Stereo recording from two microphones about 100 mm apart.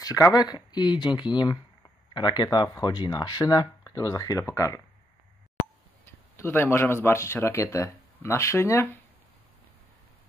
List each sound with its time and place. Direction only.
0.0 s speech: 35° left (ahead or behind)
6.3 s speech: 25° left (ahead or behind)